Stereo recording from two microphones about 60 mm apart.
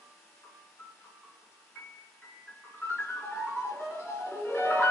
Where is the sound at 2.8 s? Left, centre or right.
Left.